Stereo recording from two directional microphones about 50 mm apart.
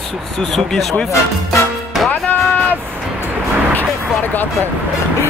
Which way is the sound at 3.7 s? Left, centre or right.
Left.